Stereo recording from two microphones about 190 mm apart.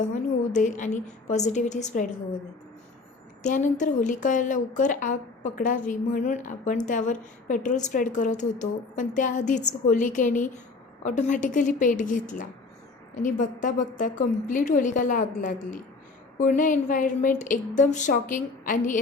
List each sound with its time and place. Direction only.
0.0 s speech: 40° left (ahead or behind)
3.4 s a woman's voice: 40° left (ahead or behind)